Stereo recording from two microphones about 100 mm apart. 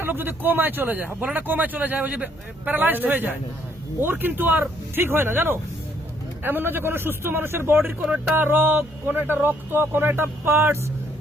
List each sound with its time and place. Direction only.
0.0 s speech: 20° right (ahead or behind)